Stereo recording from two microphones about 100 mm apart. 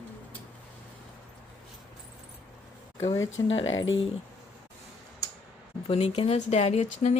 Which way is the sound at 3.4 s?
40° left (ahead or behind).